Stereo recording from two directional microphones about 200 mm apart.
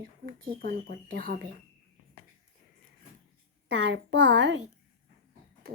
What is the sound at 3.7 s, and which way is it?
Speech, 60° right (ahead or behind).